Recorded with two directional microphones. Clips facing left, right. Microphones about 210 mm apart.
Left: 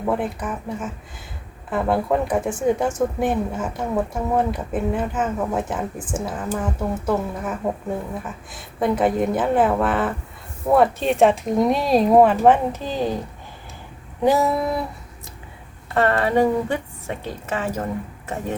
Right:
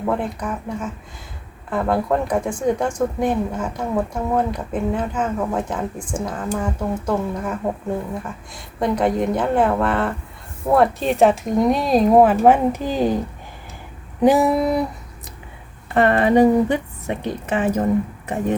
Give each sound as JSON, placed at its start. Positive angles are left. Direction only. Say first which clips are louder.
{"t": 0.0, "sound": "a woman's voice", "louder": "even", "side_deg": 5}
{"t": 14.2, "sound": "speech", "louder": "right 3 dB", "side_deg": -15}
{"t": 16.0, "sound": "speech", "louder": "right 4 dB", "side_deg": -15}